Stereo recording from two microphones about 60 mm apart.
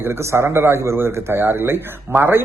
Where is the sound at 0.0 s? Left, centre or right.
Right.